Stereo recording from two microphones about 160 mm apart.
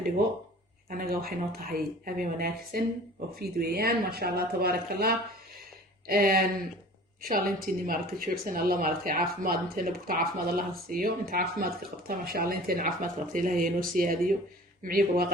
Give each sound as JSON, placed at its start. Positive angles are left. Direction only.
{"t": 0.9, "sound": "speech", "side_deg": -65}